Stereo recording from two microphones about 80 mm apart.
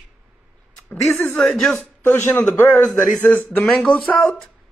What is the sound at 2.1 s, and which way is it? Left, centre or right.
Speech, left.